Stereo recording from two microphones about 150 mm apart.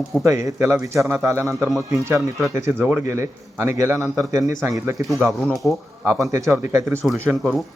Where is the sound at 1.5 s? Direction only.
Centre (ahead or behind).